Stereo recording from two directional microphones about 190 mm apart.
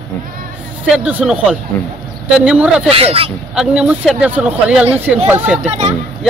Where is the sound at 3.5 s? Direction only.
5° right (ahead or behind).